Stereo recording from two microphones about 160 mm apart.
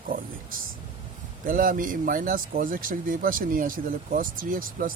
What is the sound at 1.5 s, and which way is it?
Speech, 60° right (ahead or behind).